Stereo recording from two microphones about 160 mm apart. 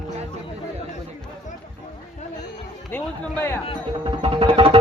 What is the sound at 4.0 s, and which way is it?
Music, 35° right (ahead or behind).